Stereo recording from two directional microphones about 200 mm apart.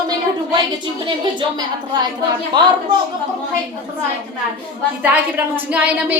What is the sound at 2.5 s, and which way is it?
Speech, 25° right (ahead or behind).